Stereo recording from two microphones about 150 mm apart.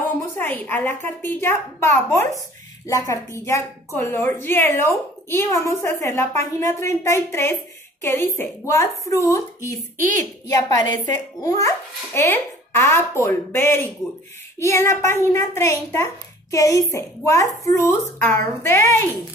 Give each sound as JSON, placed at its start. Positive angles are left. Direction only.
{"t": 0.4, "sound": "a woman's voice", "side_deg": 10}
{"t": 9.9, "sound": "a woman's voice", "side_deg": -60}
{"t": 10.5, "sound": "a woman's voice", "side_deg": 25}